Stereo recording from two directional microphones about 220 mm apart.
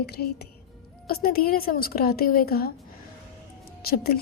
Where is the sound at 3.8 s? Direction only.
45° left (ahead or behind).